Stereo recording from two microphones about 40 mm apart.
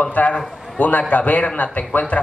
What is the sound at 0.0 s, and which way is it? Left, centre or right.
A man's voice, left.